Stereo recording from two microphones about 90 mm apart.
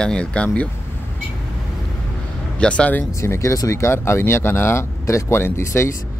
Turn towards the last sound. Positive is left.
turn(degrees=30)  # may be behind; listen again after turning